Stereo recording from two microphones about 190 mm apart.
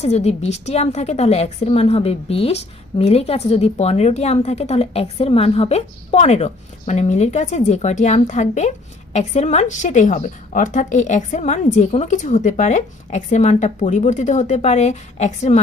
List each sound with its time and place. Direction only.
0.0 s a woman's voice: 35° left (ahead or behind)